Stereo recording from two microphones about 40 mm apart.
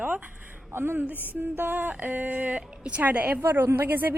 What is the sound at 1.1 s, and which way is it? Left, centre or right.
Music, right.